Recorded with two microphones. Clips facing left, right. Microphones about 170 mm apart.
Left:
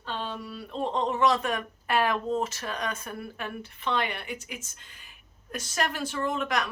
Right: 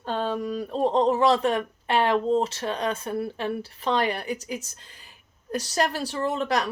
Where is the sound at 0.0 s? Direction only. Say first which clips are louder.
Right 8 dB; 45° right (ahead or behind).